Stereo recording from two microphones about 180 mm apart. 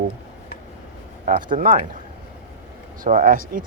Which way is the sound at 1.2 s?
45° right (ahead or behind).